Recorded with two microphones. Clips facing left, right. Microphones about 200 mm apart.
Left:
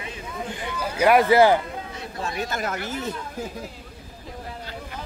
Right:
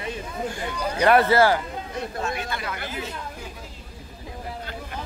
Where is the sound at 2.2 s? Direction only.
45° left (ahead or behind).